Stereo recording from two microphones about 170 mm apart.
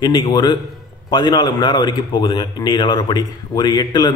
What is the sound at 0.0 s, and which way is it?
A man's voice, 25° left (ahead or behind).